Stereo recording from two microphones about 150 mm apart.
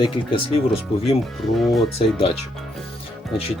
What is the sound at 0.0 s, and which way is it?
Speech, 35° left (ahead or behind).